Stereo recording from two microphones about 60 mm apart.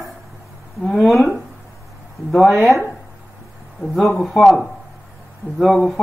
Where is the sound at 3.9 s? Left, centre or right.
Centre.